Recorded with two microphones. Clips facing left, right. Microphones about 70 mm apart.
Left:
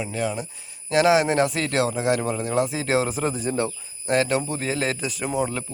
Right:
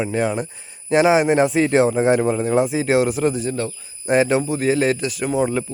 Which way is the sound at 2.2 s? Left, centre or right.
Centre.